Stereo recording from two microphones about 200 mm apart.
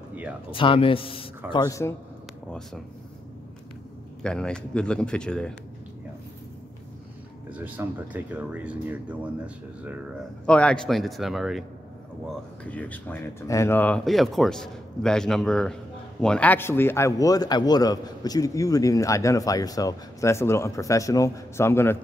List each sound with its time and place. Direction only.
0.1 s a sound: 5° right (ahead or behind)
0.5 s speech: 25° left (ahead or behind)
1.5 s speech: 15° left (ahead or behind)
4.2 s speech: 5° left (ahead or behind)
7.5 s speech: 10° right (ahead or behind)
10.4 s speech: 5° left (ahead or behind)